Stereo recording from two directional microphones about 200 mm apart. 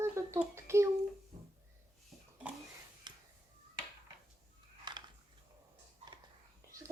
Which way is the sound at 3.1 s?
20° right (ahead or behind).